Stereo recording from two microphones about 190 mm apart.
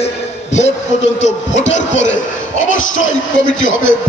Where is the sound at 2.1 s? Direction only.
85° left.